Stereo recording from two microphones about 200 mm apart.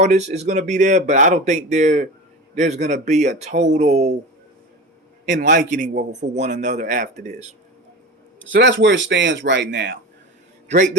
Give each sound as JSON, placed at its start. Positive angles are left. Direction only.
{"t": 0.0, "sound": "speech", "side_deg": -35}
{"t": 5.2, "sound": "a man's voice", "side_deg": -40}
{"t": 8.4, "sound": "speech", "side_deg": -65}